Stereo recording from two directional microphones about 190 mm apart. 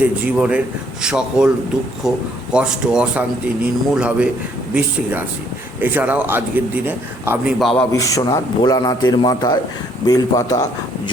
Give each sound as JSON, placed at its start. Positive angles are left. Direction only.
{"t": 0.0, "sound": "a man's voice", "side_deg": -5}
{"t": 7.8, "sound": "a man's voice", "side_deg": 15}